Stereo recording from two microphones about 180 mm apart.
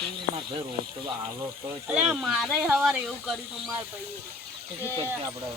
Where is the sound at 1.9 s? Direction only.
5° right (ahead or behind).